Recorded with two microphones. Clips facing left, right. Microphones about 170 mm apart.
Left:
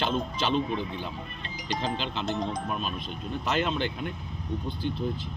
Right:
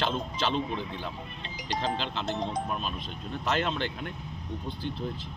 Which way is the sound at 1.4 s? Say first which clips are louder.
Even; 30° right (ahead or behind).